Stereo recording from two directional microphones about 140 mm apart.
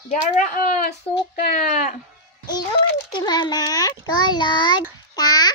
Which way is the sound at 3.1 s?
30° left (ahead or behind).